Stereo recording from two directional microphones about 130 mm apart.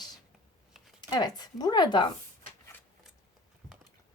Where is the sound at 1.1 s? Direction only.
30° left (ahead or behind).